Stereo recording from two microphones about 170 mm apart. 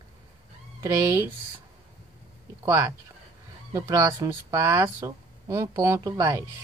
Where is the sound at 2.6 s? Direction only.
20° right (ahead or behind).